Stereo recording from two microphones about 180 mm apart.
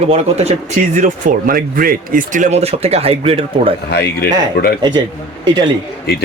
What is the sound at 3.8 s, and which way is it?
Speech, 65° left (ahead or behind).